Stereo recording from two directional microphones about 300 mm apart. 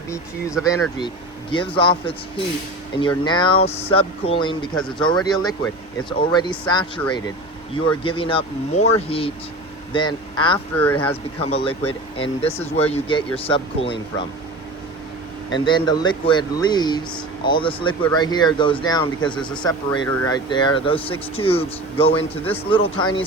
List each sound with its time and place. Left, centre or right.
0.6 s speech: centre
11.4 s speech: centre
15.6 s speech: centre